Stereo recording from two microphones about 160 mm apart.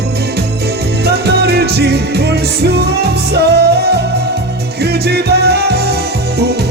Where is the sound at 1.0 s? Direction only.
90° right.